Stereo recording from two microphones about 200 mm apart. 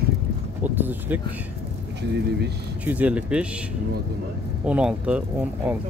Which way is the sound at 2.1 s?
55° right (ahead or behind).